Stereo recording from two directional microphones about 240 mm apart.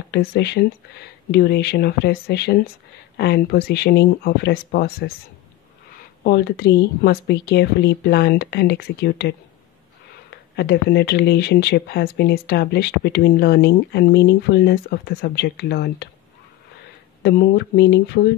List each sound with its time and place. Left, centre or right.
0.1 s speech: left
6.2 s speech: left
10.5 s speech: left
17.2 s speech: left